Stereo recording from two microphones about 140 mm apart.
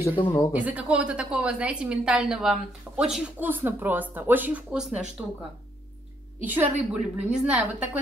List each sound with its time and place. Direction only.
0.0 s speech: 40° left (ahead or behind)
0.5 s a woman's voice: 10° right (ahead or behind)
6.4 s a woman's voice: 15° right (ahead or behind)